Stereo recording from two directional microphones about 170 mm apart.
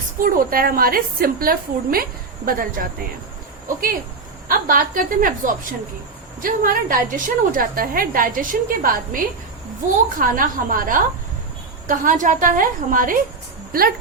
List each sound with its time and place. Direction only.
0.2 s a woman's voice: 55° right (ahead or behind)
4.4 s a woman's voice: 55° right (ahead or behind)